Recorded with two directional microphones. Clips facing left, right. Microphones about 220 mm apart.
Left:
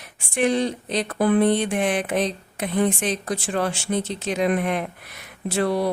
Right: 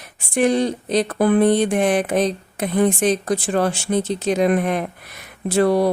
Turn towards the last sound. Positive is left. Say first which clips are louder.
# right 6 dB
turn(degrees=-45)  # may be behind; listen again after turning